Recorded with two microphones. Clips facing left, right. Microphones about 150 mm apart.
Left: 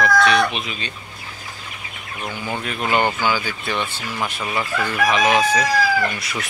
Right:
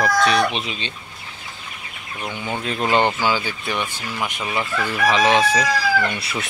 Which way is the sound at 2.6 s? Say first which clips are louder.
Right 2 dB; 30° right (ahead or behind).